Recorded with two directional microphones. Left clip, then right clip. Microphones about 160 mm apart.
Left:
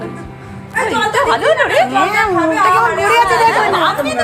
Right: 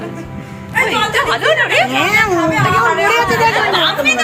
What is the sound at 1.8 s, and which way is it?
Speech, centre (ahead or behind).